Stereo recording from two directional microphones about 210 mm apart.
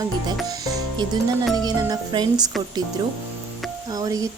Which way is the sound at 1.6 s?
20° right (ahead or behind).